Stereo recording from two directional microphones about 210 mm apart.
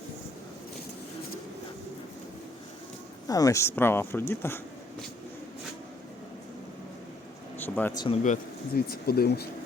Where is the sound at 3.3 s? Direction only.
15° left (ahead or behind).